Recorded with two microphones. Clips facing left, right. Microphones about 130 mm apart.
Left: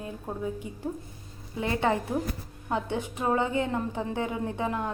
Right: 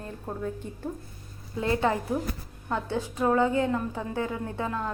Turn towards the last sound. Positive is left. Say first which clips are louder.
# left 1 dB
turn(degrees=20)  # may be behind; listen again after turning